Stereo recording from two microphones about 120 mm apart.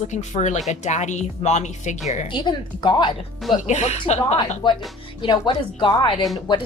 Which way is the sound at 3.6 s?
70° left (ahead or behind).